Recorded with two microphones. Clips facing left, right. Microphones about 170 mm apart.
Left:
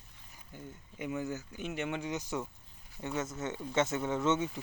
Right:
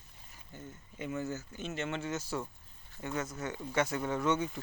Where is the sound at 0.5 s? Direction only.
15° left (ahead or behind).